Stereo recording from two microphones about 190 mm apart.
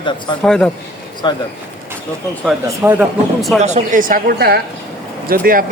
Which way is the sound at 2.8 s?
10° right (ahead or behind).